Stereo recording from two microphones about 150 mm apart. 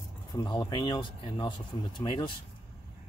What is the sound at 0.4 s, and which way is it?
Speech, 30° left (ahead or behind).